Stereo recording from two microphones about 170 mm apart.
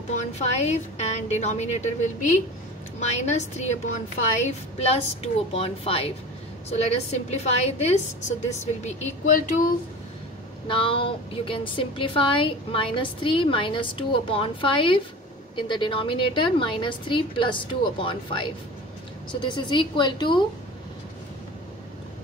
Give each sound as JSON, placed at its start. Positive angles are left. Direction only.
{"t": 0.1, "sound": "a woman's voice", "side_deg": 40}
{"t": 3.0, "sound": "a woman's voice", "side_deg": 40}
{"t": 10.7, "sound": "a woman's voice", "side_deg": 30}